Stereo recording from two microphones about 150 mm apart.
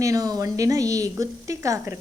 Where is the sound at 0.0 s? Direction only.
25° right (ahead or behind).